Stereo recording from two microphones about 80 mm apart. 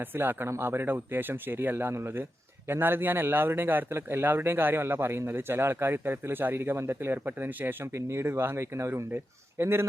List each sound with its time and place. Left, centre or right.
0.0 s speech: right